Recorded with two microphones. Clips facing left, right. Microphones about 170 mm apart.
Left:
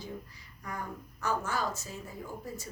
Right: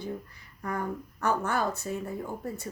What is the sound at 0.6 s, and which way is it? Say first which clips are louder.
Speech: right 7 dB; 55° right (ahead or behind).